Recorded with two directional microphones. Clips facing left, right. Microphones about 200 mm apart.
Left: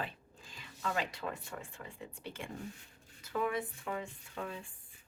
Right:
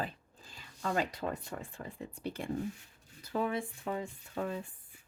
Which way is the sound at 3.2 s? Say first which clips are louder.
Right 1 dB; 30° right (ahead or behind).